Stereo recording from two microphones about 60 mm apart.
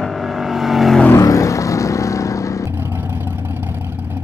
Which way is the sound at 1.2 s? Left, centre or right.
Left.